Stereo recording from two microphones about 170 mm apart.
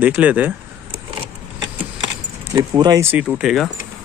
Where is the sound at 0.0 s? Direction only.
10° right (ahead or behind).